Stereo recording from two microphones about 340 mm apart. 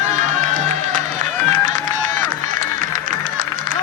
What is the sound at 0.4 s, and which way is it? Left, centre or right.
Music, right.